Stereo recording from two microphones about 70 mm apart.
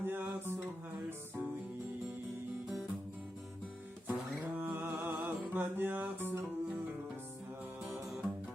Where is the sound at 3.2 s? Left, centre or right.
Centre.